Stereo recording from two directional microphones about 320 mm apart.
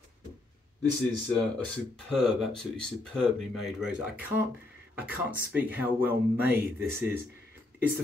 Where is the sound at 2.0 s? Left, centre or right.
Centre.